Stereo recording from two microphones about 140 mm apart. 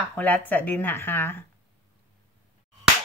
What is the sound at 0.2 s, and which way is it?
A woman's voice, 10° left (ahead or behind).